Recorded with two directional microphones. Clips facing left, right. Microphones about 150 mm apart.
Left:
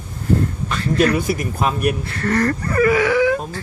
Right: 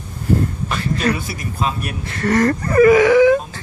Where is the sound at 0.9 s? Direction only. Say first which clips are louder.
Left 7 dB; 50° left (ahead or behind).